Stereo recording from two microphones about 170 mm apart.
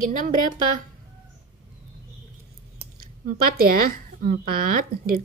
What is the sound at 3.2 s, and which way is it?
Speech, 60° right (ahead or behind).